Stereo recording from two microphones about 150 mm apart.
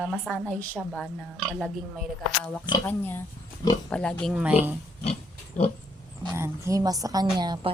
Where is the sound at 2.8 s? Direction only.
15° left (ahead or behind).